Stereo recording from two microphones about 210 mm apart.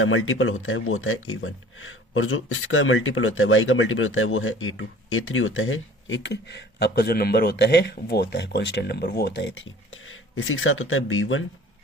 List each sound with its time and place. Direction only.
0.0 s speech: 70° left (ahead or behind)